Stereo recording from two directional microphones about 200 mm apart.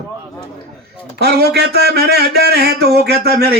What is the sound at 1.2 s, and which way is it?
Speech, 55° right (ahead or behind).